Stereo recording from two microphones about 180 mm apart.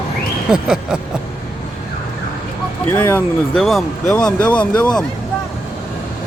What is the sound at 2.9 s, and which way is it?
Speech, 10° left (ahead or behind).